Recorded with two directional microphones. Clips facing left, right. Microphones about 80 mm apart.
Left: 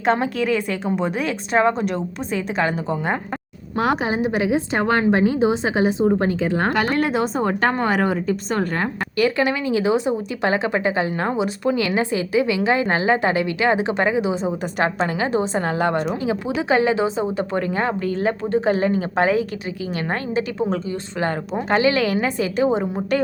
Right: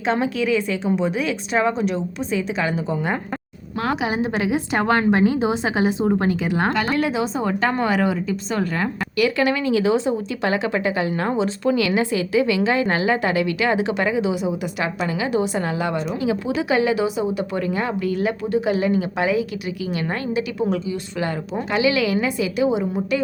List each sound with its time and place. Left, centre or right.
0.0 s a woman's voice: left
4.2 s a woman's voice: left
6.9 s a woman's voice: left
7.7 s a woman's voice: left
9.5 s a woman's voice: left
14.4 s a woman's voice: left
15.3 s a woman's voice: left
15.6 s a woman's voice: left
16.6 s a woman's voice: left